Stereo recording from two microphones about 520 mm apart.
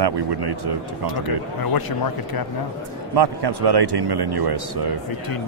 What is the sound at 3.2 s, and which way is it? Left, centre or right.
Speech, right.